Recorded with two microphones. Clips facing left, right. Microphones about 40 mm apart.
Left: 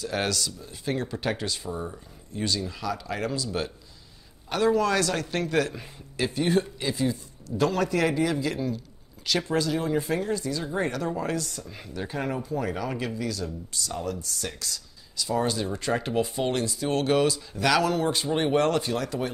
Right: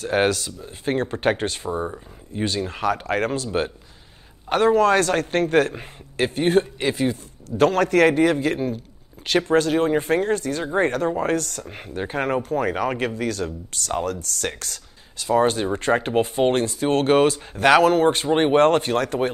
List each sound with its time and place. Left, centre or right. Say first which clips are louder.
0.0 s speech: right 8 dB; right